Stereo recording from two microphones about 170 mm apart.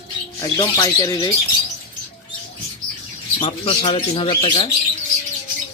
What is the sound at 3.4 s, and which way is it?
Speech, 35° left (ahead or behind).